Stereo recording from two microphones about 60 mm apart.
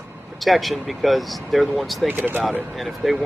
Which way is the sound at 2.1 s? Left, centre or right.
Right.